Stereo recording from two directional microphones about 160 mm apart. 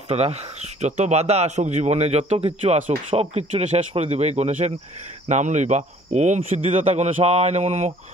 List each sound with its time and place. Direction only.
0.1 s speech: 40° right (ahead or behind)